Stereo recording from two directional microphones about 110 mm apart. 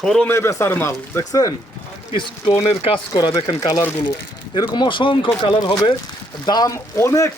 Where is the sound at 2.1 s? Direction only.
50° left (ahead or behind).